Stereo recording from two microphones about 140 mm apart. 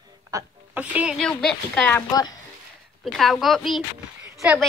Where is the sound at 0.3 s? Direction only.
20° right (ahead or behind).